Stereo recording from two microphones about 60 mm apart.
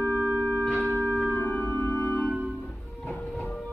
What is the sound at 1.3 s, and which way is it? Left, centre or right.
Organ, left.